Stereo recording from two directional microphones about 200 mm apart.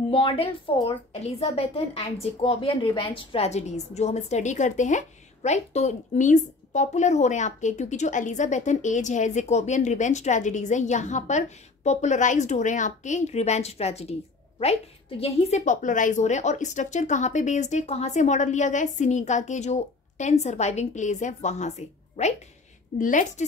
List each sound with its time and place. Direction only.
0.1 s a woman's voice: 25° left (ahead or behind)